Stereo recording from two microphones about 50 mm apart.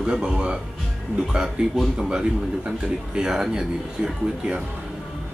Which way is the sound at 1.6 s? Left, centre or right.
Centre.